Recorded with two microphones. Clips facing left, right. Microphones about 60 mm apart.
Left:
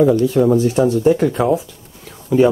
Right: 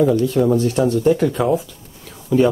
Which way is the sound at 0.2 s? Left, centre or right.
Centre.